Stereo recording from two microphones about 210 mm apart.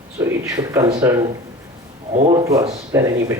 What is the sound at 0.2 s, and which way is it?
Speech, 15° right (ahead or behind).